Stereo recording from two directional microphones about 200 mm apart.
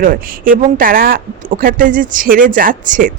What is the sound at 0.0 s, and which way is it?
Speech, 45° right (ahead or behind).